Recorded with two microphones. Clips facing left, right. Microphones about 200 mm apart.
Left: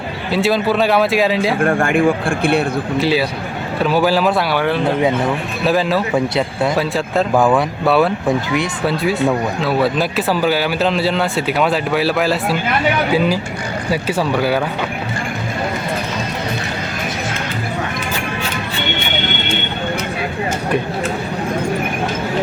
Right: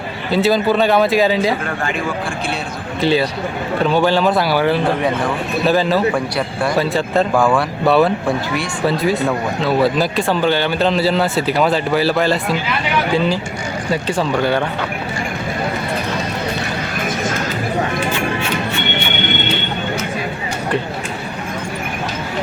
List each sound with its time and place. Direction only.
0.3 s speech: centre (ahead or behind)
1.6 s speech: 50° left (ahead or behind)
3.0 s speech: 5° left (ahead or behind)
7.3 s speech: 20° left (ahead or behind)
7.9 s speech: centre (ahead or behind)